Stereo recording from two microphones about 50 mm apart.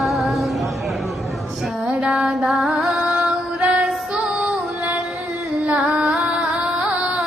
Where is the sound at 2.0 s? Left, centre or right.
Centre.